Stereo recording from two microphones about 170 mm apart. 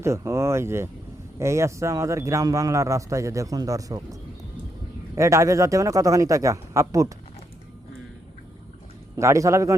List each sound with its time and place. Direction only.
0.0 s speech: 15° right (ahead or behind)
9.1 s speech: 15° right (ahead or behind)